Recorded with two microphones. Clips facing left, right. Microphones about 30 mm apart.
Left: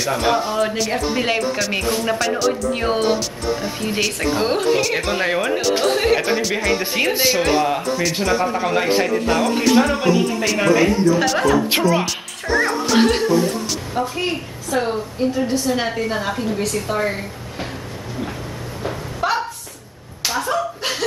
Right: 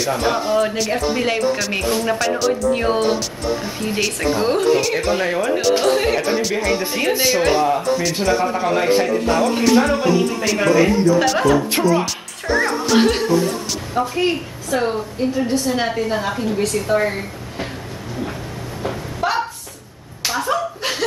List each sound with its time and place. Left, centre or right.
0.0 s speech: centre
5.6 s speech: centre
6.8 s speech: centre
7.1 s speech: centre
12.0 s music: centre
13.9 s speech: centre
18.8 s a sound: centre
20.2 s slap: centre